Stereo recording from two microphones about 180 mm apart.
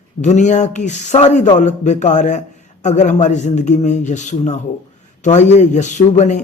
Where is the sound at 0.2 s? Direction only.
40° left (ahead or behind).